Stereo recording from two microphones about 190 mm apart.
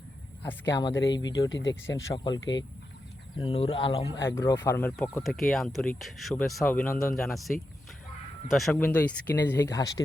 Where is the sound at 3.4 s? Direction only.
30° left (ahead or behind).